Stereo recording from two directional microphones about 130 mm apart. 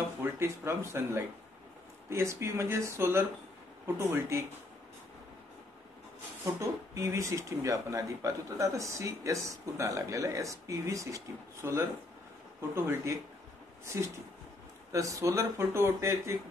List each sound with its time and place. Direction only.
0.2 s speech: 20° right (ahead or behind)
6.4 s speech: 20° right (ahead or behind)